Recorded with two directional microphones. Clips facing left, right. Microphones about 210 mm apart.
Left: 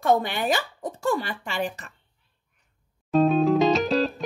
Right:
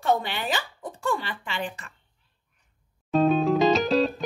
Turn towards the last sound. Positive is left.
turn(degrees=0)  # may be behind; listen again after turning